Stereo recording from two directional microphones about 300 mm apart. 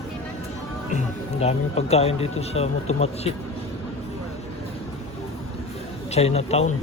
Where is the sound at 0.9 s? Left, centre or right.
Left.